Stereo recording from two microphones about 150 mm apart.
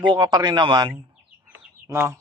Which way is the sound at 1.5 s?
15° right (ahead or behind).